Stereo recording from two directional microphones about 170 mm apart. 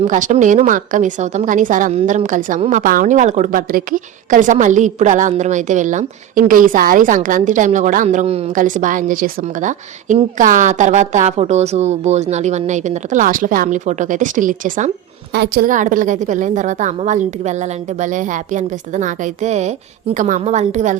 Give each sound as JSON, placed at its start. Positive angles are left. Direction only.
{"t": 0.0, "sound": "a woman's voice", "side_deg": -50}
{"t": 15.3, "sound": "a woman's voice", "side_deg": -75}
{"t": 15.7, "sound": "a woman's voice", "side_deg": -50}